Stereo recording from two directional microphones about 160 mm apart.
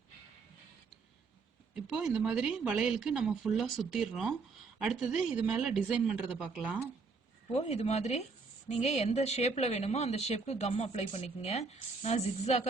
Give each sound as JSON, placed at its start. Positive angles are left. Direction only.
{"t": 1.7, "sound": "speech", "side_deg": -5}
{"t": 7.5, "sound": "speech", "side_deg": 40}